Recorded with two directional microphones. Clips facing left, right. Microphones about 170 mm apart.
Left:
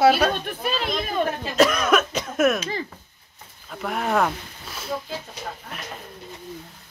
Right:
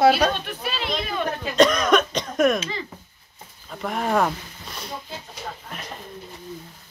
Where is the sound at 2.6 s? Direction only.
45° left (ahead or behind).